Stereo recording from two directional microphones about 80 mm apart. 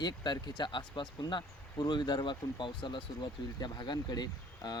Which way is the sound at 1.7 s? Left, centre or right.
Left.